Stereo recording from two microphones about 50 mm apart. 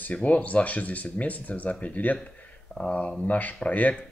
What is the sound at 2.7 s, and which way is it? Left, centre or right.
Speech, centre.